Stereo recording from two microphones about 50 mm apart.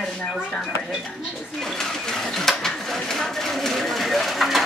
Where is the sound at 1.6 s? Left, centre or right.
Centre.